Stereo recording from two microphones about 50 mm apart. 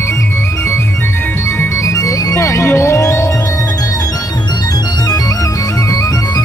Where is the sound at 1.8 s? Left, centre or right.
Left.